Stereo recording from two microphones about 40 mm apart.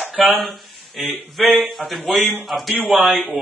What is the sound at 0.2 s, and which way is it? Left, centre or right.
A man's voice, centre.